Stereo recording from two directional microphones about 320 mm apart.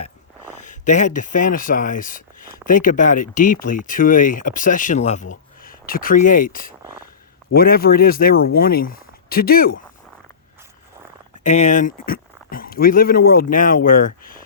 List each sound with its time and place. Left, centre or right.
0.5 s speech: left
11.4 s speech: left